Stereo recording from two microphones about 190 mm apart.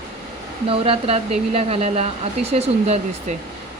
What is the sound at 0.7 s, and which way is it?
Speech, 30° right (ahead or behind).